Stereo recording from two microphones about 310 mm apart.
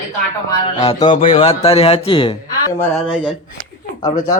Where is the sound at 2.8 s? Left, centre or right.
Centre.